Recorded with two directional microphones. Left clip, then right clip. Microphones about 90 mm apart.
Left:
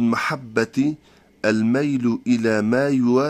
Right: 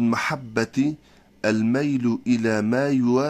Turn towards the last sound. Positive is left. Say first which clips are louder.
# left 3 dB
turn(degrees=15)  # may be behind; listen again after turning